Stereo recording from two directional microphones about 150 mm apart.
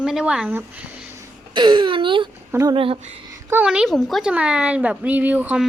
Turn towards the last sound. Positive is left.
turn(degrees=-10)  # may be behind; listen again after turning